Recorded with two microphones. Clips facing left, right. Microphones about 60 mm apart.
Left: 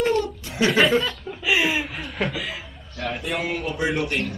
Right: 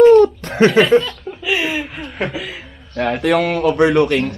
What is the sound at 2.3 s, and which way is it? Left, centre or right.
Speech, right.